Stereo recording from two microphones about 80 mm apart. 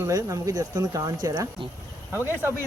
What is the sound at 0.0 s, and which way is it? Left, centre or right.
Speech, right.